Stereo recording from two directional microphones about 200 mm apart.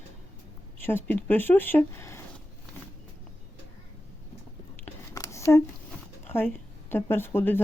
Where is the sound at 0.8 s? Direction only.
10° left (ahead or behind).